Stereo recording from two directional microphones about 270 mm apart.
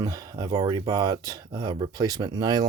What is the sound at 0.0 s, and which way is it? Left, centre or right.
Speech, centre.